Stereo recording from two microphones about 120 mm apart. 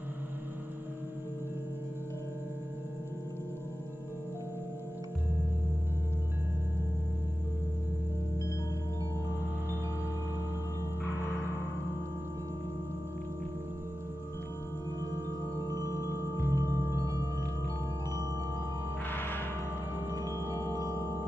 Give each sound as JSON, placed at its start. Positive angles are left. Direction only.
{"t": 15.7, "sound": "music", "side_deg": -30}
{"t": 19.0, "sound": "a sound", "side_deg": 15}
{"t": 20.1, "sound": "marimba", "side_deg": -30}